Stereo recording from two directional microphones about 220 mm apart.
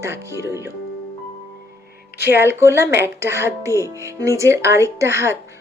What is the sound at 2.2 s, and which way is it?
A woman's voice, 10° right (ahead or behind).